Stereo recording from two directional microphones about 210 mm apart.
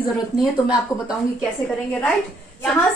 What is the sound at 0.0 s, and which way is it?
Speech, 20° left (ahead or behind).